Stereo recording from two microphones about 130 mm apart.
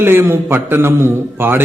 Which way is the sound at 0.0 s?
15° right (ahead or behind).